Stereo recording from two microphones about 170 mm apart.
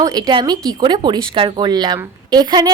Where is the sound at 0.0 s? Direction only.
25° right (ahead or behind).